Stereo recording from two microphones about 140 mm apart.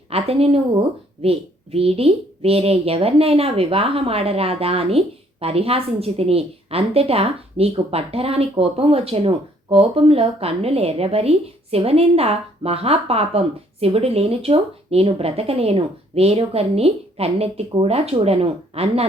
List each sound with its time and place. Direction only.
0.1 s speech: 45° right (ahead or behind)